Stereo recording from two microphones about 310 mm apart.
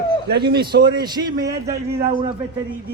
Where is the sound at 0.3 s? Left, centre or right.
Right.